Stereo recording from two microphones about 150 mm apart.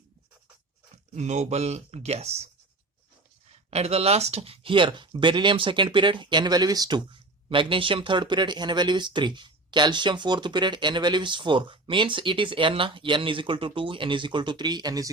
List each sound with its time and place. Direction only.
1.1 s speech: 50° right (ahead or behind)
3.7 s speech: 45° right (ahead or behind); by 15.1 s 25° right (ahead or behind)